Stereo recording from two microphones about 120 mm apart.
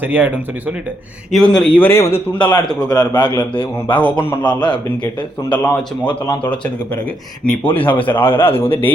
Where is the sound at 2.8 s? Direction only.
35° left (ahead or behind).